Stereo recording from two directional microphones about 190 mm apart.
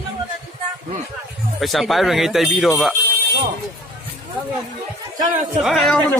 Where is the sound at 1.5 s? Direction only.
Centre (ahead or behind).